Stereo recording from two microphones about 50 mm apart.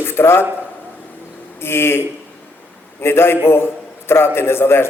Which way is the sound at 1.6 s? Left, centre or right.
Left.